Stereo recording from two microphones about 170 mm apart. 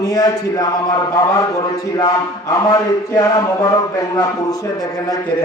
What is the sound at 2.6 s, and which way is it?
Mantra, 20° left (ahead or behind).